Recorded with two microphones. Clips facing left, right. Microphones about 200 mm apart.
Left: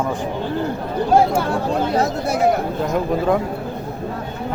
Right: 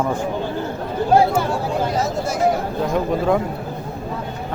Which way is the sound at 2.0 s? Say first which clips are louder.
Left 2 dB; 60° left (ahead or behind).